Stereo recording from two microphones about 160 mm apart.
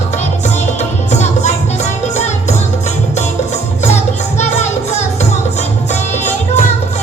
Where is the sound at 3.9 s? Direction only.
45° left (ahead or behind).